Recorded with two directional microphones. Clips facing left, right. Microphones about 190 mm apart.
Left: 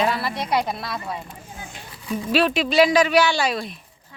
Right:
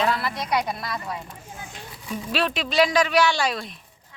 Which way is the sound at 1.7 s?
5° left (ahead or behind).